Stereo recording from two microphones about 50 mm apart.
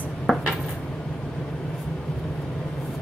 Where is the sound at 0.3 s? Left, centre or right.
Centre.